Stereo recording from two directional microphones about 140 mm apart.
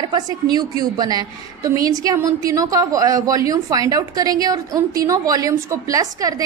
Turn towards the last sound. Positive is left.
turn(degrees=-25)  # may be behind; listen again after turning